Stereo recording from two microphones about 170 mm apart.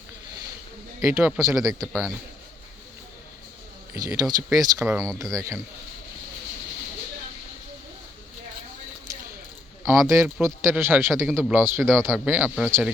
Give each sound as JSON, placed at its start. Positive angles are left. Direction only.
{"t": 1.0, "sound": "speech", "side_deg": -15}
{"t": 1.5, "sound": "a man's voice", "side_deg": 0}
{"t": 3.9, "sound": "speech", "side_deg": -20}
{"t": 10.1, "sound": "speech", "side_deg": -15}